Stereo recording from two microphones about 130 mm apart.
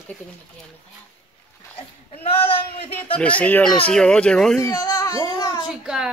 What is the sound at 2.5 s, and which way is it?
Speech, 45° left (ahead or behind).